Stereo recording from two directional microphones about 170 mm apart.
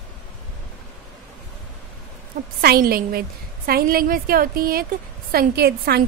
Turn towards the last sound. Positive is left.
turn(degrees=-65)  # may be behind; listen again after turning